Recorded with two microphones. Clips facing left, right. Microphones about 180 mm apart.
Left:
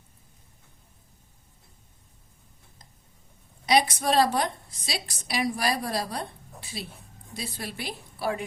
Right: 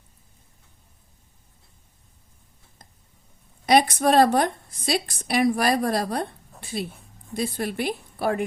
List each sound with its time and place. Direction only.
3.7 s a woman's voice: 55° right (ahead or behind)